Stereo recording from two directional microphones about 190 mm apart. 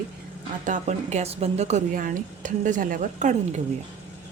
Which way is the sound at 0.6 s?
40° right (ahead or behind).